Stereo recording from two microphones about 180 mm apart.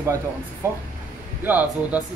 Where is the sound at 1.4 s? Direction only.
10° right (ahead or behind).